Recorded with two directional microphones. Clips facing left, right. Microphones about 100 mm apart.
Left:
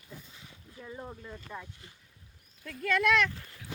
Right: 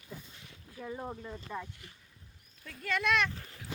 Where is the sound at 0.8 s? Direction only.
20° right (ahead or behind).